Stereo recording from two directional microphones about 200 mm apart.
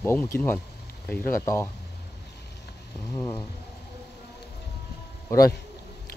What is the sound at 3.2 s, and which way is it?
Speech, 15° left (ahead or behind).